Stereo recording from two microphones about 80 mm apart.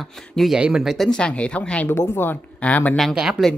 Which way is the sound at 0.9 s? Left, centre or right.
Centre.